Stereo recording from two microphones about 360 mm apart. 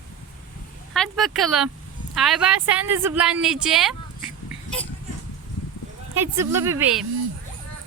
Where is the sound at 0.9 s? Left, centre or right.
Centre.